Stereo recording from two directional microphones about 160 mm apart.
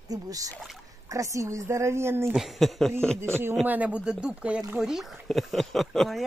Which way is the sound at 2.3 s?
Centre (ahead or behind).